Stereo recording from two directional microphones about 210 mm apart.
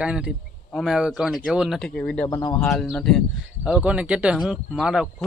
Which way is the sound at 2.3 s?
20° left (ahead or behind).